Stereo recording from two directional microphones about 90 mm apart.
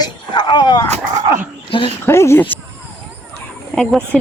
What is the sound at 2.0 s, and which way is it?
Speech, 30° left (ahead or behind).